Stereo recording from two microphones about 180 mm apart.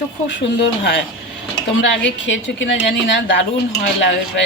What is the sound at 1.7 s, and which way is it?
A woman's voice, 85° left.